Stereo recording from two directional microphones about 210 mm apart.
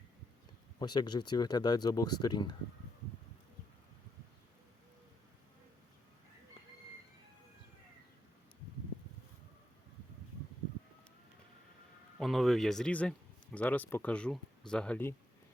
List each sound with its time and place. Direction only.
0.8 s speech: 20° left (ahead or behind)
12.2 s speech: centre (ahead or behind)